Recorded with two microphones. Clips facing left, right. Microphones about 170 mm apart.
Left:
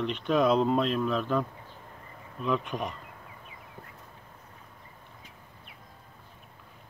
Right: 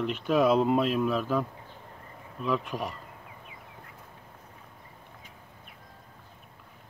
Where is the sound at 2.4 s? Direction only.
Centre (ahead or behind).